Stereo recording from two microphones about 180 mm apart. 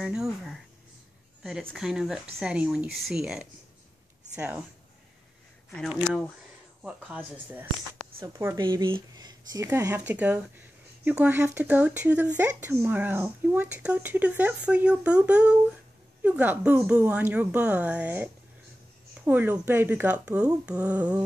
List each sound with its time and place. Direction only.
0.0 s speech: 5° right (ahead or behind)
5.8 s speech: centre (ahead or behind); by 8.6 s 15° right (ahead or behind)
8.6 s speech: 25° right (ahead or behind); by 21.2 s 5° right (ahead or behind)